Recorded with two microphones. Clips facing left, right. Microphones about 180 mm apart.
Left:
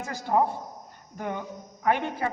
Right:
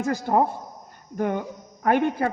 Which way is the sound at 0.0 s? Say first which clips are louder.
Right 3 dB; 50° right (ahead or behind).